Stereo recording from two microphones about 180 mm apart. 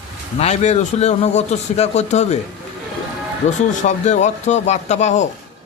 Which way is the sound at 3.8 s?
40° left (ahead or behind).